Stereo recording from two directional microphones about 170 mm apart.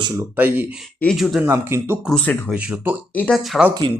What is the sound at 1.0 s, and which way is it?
Speech, centre (ahead or behind).